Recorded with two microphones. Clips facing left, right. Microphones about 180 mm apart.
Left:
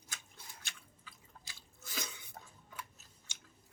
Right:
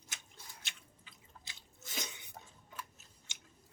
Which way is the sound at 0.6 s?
20° right (ahead or behind).